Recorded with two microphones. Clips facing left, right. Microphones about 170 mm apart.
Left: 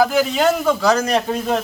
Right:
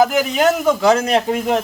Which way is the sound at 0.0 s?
15° right (ahead or behind).